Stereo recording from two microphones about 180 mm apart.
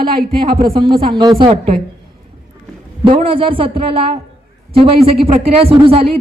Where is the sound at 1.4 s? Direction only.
30° right (ahead or behind).